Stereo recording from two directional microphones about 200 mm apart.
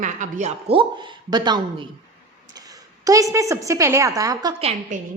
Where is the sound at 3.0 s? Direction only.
15° right (ahead or behind).